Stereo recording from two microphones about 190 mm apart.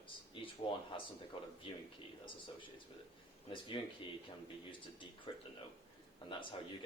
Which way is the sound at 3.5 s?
25° left (ahead or behind).